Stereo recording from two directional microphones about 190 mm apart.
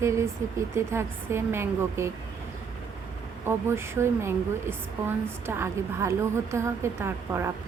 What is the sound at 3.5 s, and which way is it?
A woman's voice, 15° right (ahead or behind).